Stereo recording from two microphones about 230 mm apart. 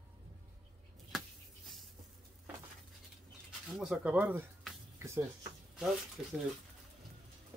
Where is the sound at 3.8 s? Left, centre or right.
Centre.